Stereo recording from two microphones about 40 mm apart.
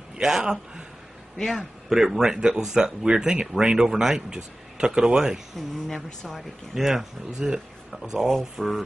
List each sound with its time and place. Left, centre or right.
0.2 s speech: centre
1.4 s a man's voice: centre
1.9 s speech: centre
6.7 s speech: centre
7.3 s speech: right
8.2 s speech: centre